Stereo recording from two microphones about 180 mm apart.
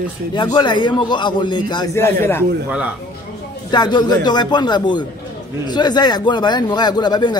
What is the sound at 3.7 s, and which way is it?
Speech, 25° left (ahead or behind).